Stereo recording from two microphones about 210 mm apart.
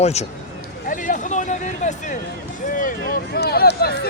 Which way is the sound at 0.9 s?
40° left (ahead or behind).